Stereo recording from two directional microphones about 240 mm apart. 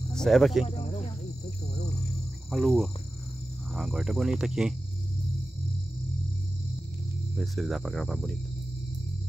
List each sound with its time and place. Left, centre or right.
0.1 s speech: centre
0.7 s cricket: left
2.5 s speech: centre
7.3 s speech: centre